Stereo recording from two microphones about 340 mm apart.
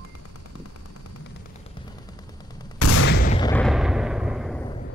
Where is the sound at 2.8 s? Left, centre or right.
Left.